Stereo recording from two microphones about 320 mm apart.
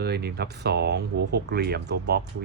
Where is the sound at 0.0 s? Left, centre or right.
Right.